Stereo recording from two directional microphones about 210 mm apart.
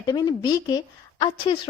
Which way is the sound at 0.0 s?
20° left (ahead or behind).